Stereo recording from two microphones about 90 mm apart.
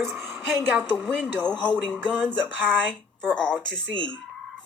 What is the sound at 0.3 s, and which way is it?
Speech, 15° right (ahead or behind).